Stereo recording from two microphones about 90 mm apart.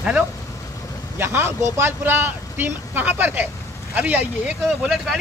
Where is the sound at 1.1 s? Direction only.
25° right (ahead or behind).